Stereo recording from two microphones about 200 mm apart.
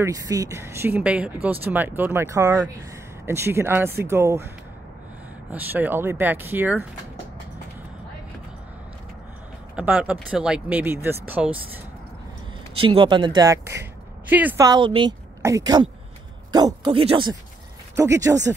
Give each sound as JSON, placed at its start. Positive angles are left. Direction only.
{"t": 0.0, "sound": "speech", "side_deg": -15}
{"t": 5.5, "sound": "speech", "side_deg": -10}
{"t": 9.8, "sound": "speech", "side_deg": -5}
{"t": 12.8, "sound": "speech", "side_deg": -25}
{"t": 14.7, "sound": "a woman's voice", "side_deg": -25}
{"t": 17.9, "sound": "speech", "side_deg": -15}